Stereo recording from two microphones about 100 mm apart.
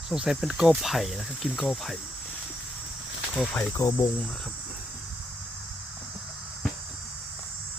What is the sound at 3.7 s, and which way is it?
Speech, 30° left (ahead or behind).